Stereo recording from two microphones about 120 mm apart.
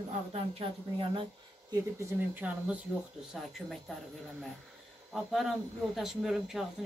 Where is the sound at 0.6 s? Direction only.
50° right (ahead or behind).